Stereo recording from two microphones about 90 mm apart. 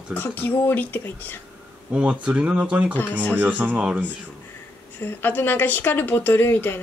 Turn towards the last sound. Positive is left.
turn(degrees=20)  # may be behind; listen again after turning